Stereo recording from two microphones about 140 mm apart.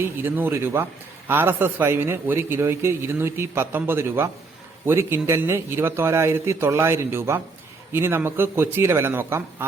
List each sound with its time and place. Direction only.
0.0 s a man's voice: 15° right (ahead or behind)